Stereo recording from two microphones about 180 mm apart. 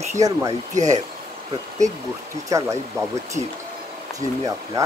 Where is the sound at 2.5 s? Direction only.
15° right (ahead or behind).